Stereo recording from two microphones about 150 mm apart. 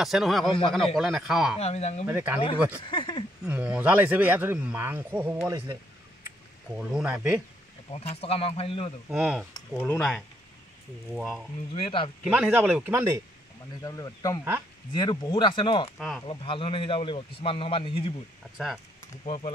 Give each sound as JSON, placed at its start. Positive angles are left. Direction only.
{"t": 0.0, "sound": "speech", "side_deg": 0}
{"t": 1.6, "sound": "speech", "side_deg": 45}
{"t": 2.0, "sound": "speech", "side_deg": -10}
{"t": 2.8, "sound": "speech", "side_deg": 30}
{"t": 3.4, "sound": "speech", "side_deg": -5}
{"t": 6.9, "sound": "speech", "side_deg": -5}
{"t": 7.9, "sound": "speech", "side_deg": 45}
{"t": 9.1, "sound": "speech", "side_deg": -5}
{"t": 9.8, "sound": "speech", "side_deg": 15}
{"t": 11.1, "sound": "speech", "side_deg": 0}
{"t": 11.7, "sound": "speech", "side_deg": 35}
{"t": 12.3, "sound": "speech", "side_deg": -10}
{"t": 13.8, "sound": "speech", "side_deg": 20}
{"t": 19.2, "sound": "speech", "side_deg": 35}